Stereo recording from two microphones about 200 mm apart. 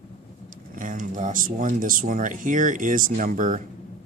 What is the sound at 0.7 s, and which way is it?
Speech, 40° right (ahead or behind).